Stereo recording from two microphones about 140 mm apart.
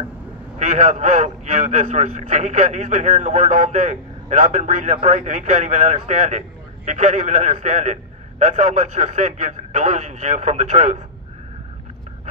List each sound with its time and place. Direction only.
0.6 s a man's voice: 55° right (ahead or behind)